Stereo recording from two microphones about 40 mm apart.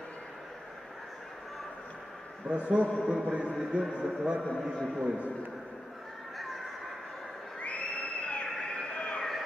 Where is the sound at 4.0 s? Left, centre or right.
Right.